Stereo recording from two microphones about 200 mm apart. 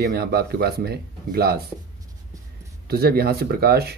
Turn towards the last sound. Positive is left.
turn(degrees=-50)  # may be behind; listen again after turning